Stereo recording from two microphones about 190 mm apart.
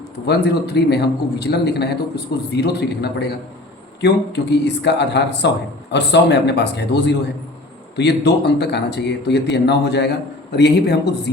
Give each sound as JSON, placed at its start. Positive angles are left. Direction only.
{"t": 0.3, "sound": "speech", "side_deg": 60}